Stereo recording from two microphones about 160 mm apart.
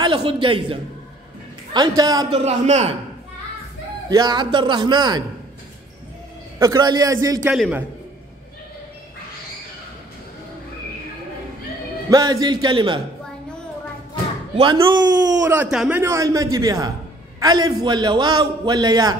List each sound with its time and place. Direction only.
0.0 s a man's voice: 35° right (ahead or behind)
2.3 s a man's voice: 45° right (ahead or behind)
4.1 s a man's voice: 25° right (ahead or behind)
6.6 s a man's voice: 25° right (ahead or behind)
7.5 s a man's voice: centre (ahead or behind)
12.1 s a man's voice: 20° right (ahead or behind)
14.5 s a man's voice: 30° right (ahead or behind)
15.5 s a man's voice: 10° right (ahead or behind)